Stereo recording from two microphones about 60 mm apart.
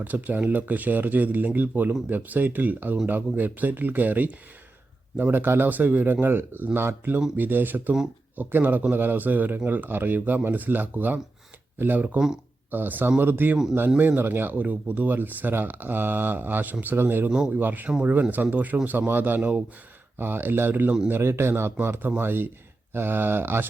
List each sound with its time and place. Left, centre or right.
0.0 s speech: right
14.6 s speech: right
21.1 s speech: right